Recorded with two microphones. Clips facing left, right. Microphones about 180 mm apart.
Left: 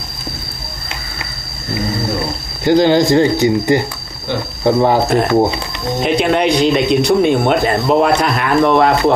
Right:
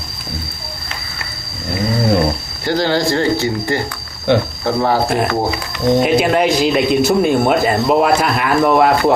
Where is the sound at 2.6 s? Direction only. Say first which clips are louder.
Left 6 dB; 15° left (ahead or behind).